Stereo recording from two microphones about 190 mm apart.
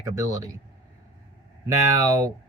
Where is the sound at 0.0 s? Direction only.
20° right (ahead or behind).